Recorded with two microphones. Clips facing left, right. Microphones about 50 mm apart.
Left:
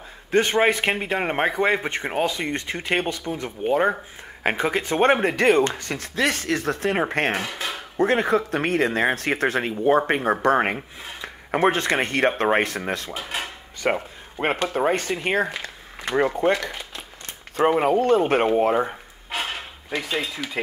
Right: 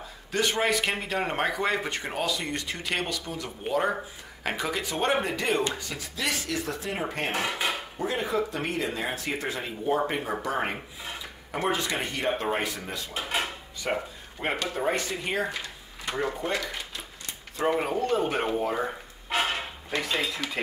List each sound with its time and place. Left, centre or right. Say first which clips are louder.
0.3 s speech: left 7 dB; left
7.4 s speech: right 1 dB; centre
8.0 s speech: left 9 dB; left
13.1 s speech: even; centre
13.7 s speech: left 6 dB; left
19.2 s a sound: right 2 dB; centre